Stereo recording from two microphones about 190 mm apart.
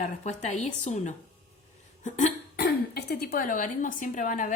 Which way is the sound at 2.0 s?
40° left (ahead or behind).